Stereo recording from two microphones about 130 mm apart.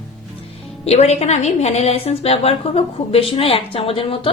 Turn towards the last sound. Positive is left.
turn(degrees=45)  # may be behind; listen again after turning